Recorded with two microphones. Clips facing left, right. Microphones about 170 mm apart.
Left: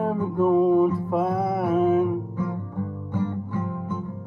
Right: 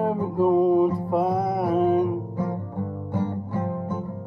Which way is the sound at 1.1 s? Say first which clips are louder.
Right 1 dB; centre (ahead or behind).